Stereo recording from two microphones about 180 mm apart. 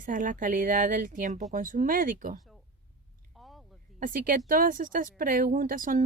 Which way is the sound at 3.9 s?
50° right (ahead or behind).